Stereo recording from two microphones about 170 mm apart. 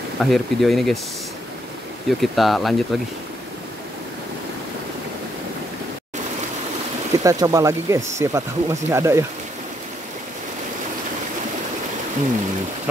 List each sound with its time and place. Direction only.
0.2 s speech: centre (ahead or behind)
2.0 s speech: centre (ahead or behind)
7.1 s speech: 20° right (ahead or behind)